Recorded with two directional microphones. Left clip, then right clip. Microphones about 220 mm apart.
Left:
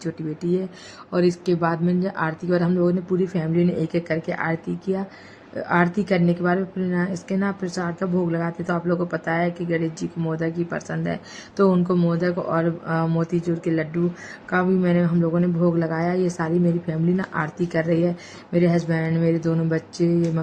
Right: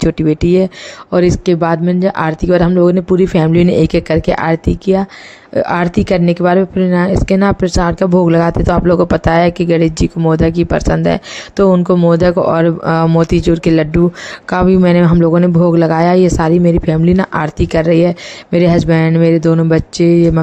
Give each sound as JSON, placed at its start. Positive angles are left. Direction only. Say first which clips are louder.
{"t": 0.0, "sound": "speech", "louder": "right 16 dB", "side_deg": -40}